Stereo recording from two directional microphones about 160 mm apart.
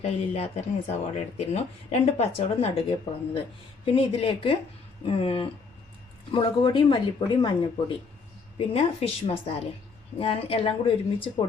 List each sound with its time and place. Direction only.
0.0 s speech: 40° left (ahead or behind)
3.8 s speech: 35° left (ahead or behind)